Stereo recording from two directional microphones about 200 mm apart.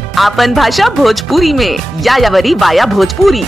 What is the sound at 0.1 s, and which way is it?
Speech, centre (ahead or behind).